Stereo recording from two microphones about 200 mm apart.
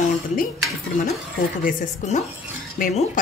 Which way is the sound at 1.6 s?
40° left (ahead or behind).